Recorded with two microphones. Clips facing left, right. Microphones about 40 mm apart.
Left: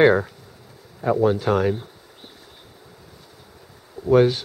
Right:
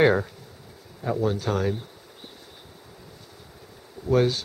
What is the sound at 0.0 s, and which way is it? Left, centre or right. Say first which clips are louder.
Speech: left 4 dB; centre.